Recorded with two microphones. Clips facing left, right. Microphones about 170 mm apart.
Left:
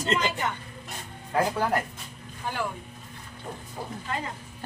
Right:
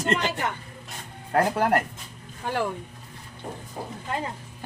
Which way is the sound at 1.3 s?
65° right (ahead or behind).